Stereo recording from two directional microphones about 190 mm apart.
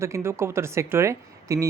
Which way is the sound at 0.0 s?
15° right (ahead or behind).